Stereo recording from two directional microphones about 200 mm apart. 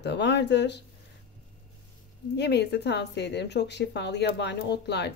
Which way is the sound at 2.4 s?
55° left (ahead or behind).